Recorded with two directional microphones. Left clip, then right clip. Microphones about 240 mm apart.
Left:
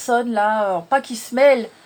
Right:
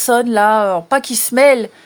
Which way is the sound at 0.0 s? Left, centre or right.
Right.